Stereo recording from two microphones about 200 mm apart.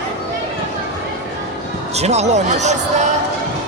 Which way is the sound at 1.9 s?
35° right (ahead or behind).